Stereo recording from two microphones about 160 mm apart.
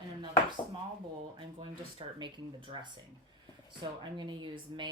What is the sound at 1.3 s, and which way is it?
Speech, 30° right (ahead or behind).